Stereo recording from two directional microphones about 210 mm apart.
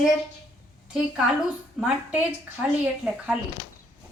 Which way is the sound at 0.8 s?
5° right (ahead or behind).